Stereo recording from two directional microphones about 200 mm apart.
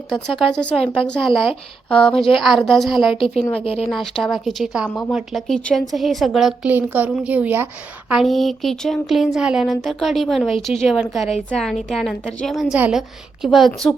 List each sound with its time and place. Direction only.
0.1 s a woman's voice: 5° left (ahead or behind)
3.5 s speech: 30° left (ahead or behind)
3.8 s a woman's voice: centre (ahead or behind)